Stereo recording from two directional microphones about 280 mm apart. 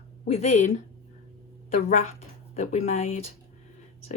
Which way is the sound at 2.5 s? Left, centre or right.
Left.